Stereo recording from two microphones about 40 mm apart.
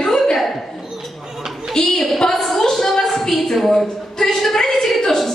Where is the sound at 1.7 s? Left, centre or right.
Centre.